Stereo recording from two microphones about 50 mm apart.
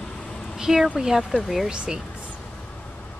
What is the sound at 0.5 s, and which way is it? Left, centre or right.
Speech, centre.